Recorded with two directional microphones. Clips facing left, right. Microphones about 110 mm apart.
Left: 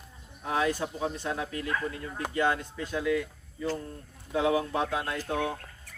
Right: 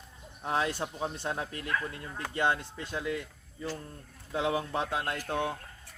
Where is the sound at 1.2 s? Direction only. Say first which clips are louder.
Left 2 dB; 35° right (ahead or behind).